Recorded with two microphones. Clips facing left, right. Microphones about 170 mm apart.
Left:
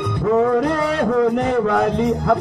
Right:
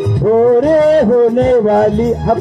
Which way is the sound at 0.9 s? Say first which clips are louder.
Right 8 dB; 40° right (ahead or behind).